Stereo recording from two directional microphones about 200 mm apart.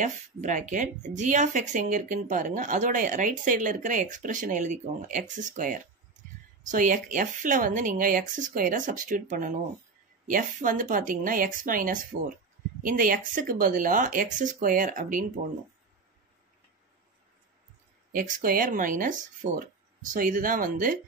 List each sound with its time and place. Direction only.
0.0 s speech: 40° right (ahead or behind)
18.1 s speech: 45° right (ahead or behind)